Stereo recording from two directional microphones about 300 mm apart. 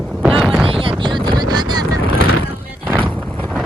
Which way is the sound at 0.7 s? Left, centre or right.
Centre.